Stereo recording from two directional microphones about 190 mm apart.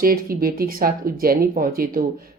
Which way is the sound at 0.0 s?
50° right (ahead or behind).